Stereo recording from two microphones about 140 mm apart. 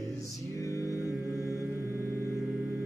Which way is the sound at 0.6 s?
20° left (ahead or behind).